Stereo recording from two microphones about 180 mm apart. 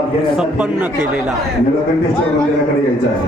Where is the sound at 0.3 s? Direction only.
5° right (ahead or behind).